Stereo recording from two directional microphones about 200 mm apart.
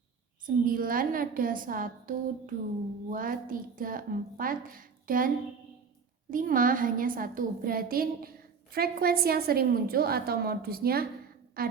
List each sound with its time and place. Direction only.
0.4 s a woman's voice: 45° right (ahead or behind)
6.3 s a woman's voice: 45° right (ahead or behind)